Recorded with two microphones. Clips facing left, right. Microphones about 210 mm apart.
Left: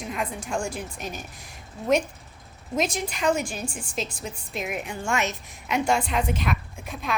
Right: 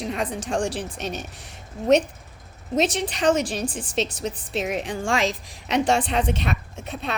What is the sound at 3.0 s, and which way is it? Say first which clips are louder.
A woman's voice: right 4 dB; 90° right.